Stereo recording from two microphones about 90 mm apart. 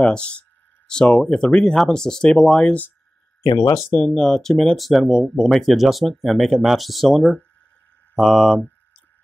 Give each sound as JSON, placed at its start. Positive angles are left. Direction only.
{"t": 0.0, "sound": "speech", "side_deg": 10}
{"t": 3.5, "sound": "speech", "side_deg": 40}
{"t": 4.0, "sound": "speech", "side_deg": 5}